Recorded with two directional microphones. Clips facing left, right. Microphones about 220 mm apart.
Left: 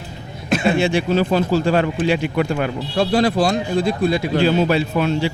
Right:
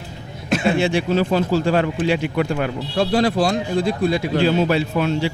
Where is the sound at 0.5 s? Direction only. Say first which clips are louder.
Left 1 dB; 15° left (ahead or behind).